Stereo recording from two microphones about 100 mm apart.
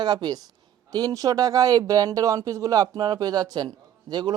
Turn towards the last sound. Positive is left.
turn(degrees=-45)  # may be behind; listen again after turning